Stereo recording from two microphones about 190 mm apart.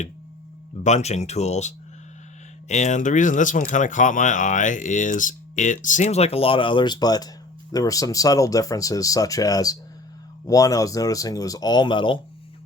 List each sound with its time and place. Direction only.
0.9 s speech: 35° left (ahead or behind)